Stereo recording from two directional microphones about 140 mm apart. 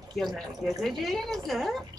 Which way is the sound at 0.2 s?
Centre (ahead or behind).